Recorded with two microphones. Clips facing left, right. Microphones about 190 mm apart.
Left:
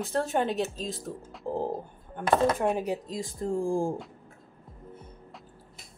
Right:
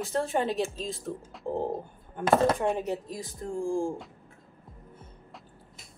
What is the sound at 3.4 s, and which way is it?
Speech, 35° left (ahead or behind).